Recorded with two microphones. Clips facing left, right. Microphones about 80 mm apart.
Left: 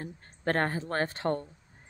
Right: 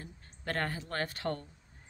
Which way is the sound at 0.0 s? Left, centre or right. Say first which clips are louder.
Left 9 dB; left.